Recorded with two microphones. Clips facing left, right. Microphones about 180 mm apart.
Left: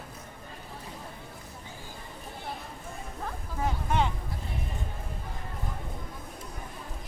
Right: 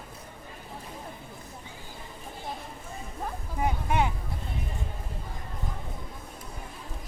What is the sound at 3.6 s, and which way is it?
Vehicle, 10° right (ahead or behind).